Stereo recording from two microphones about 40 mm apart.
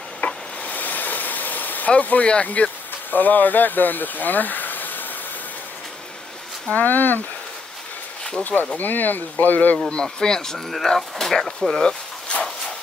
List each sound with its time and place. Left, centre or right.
0.2 s stir: left
0.7 s vehicle: left
1.9 s speech: left
6.7 s speech: left
8.4 s speech: left
9.8 s speech: left
11.8 s a sound: left